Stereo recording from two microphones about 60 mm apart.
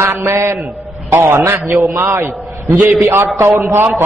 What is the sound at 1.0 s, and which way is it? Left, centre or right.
A man's voice, right.